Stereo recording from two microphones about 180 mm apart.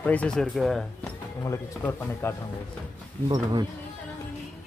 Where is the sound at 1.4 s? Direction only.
15° left (ahead or behind).